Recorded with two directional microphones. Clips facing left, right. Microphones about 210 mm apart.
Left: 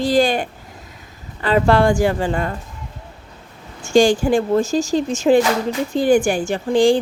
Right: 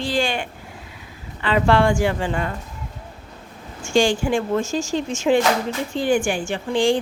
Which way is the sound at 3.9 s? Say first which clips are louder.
Left 5 dB; 40° left (ahead or behind).